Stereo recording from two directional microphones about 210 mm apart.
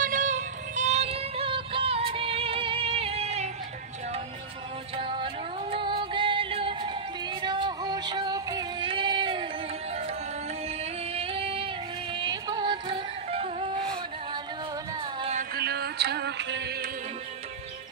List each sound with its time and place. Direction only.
0.0 s music: 40° right (ahead or behind)
4.9 s music: 25° right (ahead or behind)
11.1 s music: 25° right (ahead or behind)
15.5 s music: 50° right (ahead or behind)